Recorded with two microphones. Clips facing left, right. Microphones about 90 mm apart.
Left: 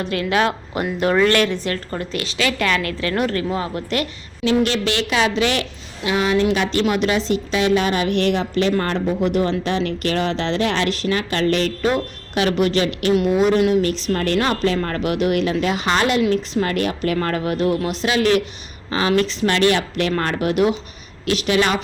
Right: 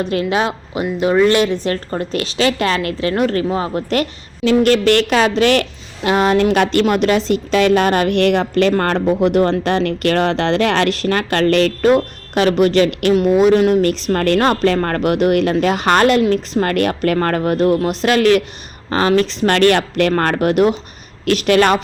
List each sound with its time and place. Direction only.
0.0 s a woman's voice: 25° right (ahead or behind)
0.7 s speech: 5° right (ahead or behind)
1.6 s a woman's voice: 30° right (ahead or behind)
4.6 s a woman's voice: 50° right (ahead or behind)
11.9 s a woman's voice: 50° right (ahead or behind)
13.5 s speech: 35° right (ahead or behind)
13.8 s a woman's voice: 55° right (ahead or behind)
18.9 s a woman's voice: 45° right (ahead or behind)